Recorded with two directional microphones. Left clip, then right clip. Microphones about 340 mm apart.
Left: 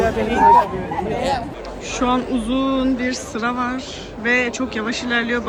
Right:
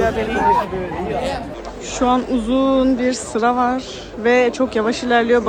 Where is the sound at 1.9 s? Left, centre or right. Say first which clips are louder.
Right 3 dB; centre.